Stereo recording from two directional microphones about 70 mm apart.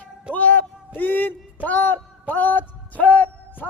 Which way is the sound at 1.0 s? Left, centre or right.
Left.